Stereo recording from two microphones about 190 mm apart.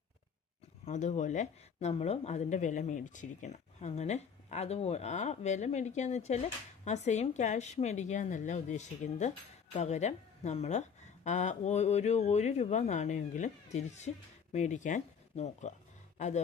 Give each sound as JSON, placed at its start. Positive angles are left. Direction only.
{"t": 0.9, "sound": "speech", "side_deg": 40}
{"t": 14.5, "sound": "speech", "side_deg": 40}